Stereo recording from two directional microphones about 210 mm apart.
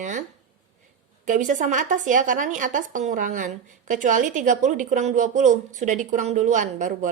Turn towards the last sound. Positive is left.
turn(degrees=-35)  # may be behind; listen again after turning